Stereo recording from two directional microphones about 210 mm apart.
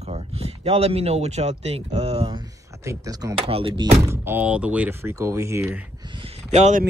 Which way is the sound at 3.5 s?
25° right (ahead or behind).